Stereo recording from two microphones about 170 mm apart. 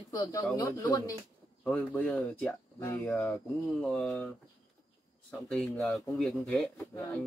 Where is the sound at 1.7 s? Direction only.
5° left (ahead or behind).